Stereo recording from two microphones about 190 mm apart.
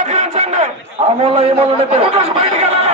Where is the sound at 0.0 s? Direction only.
40° right (ahead or behind).